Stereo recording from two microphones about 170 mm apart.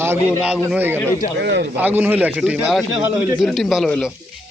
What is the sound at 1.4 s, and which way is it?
Speech, 90° right.